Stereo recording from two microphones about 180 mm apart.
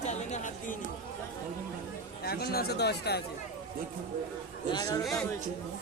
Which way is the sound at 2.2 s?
60° left (ahead or behind).